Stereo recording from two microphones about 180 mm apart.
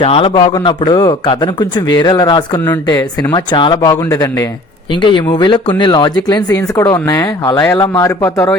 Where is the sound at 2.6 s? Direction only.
15° left (ahead or behind).